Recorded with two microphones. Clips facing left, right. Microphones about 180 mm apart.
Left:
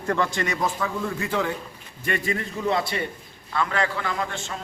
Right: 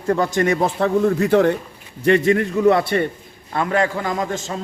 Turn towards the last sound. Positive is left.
turn(degrees=-40)  # may be behind; listen again after turning